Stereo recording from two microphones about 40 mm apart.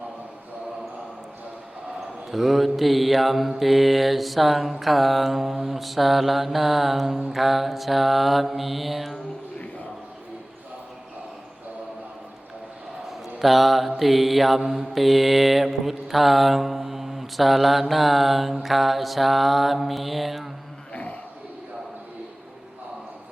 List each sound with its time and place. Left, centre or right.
2.0 s mantra: centre
13.1 s mantra: centre
20.9 s a sound: left